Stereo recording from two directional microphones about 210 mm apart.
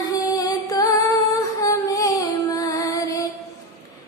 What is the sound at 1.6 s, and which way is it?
Child singing, 15° left (ahead or behind).